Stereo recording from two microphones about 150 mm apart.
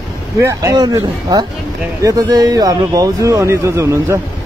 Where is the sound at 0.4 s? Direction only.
20° right (ahead or behind).